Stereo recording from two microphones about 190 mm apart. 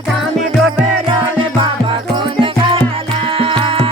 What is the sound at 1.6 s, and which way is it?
Music, 25° right (ahead or behind).